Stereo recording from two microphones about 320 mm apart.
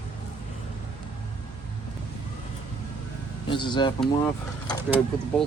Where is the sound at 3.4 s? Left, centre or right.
Centre.